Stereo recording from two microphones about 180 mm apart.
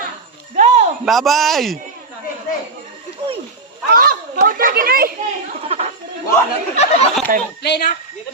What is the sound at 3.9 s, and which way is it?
Children playing, 50° right (ahead or behind).